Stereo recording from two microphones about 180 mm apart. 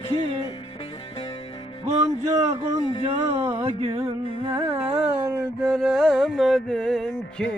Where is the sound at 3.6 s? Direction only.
30° right (ahead or behind).